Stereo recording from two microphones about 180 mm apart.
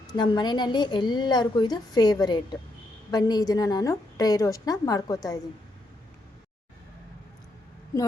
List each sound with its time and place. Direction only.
0.1 s a woman's voice: 25° left (ahead or behind)